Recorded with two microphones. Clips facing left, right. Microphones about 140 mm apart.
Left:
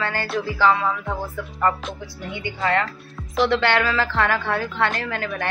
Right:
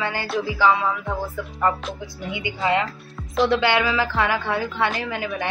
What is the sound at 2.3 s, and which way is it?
A woman's voice, 15° right (ahead or behind).